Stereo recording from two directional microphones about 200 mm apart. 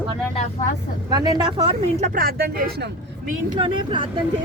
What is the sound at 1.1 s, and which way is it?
Speech, 20° right (ahead or behind).